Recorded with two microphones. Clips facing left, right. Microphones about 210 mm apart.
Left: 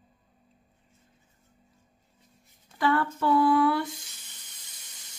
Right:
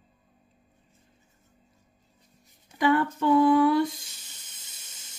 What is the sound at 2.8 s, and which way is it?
Female singing, 15° right (ahead or behind).